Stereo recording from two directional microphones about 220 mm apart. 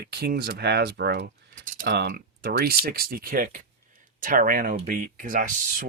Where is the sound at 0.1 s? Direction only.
45° right (ahead or behind).